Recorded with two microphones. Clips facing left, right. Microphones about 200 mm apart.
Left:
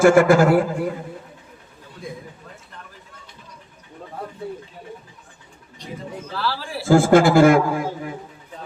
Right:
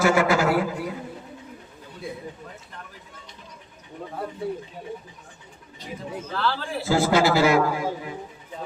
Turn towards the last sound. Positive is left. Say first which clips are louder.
# left 5 dB
turn(degrees=50)  # may be behind; listen again after turning